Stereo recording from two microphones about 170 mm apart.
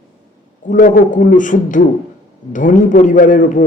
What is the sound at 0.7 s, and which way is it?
Speech, 50° left (ahead or behind).